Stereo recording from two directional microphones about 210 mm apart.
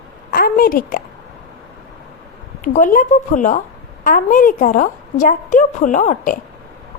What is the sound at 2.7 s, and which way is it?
A woman's voice, 40° left (ahead or behind).